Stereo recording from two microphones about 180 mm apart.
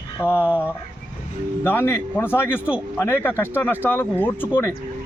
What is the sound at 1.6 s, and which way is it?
Speech, 15° left (ahead or behind).